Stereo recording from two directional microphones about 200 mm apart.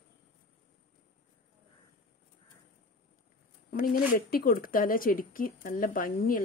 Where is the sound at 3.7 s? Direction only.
45° left (ahead or behind).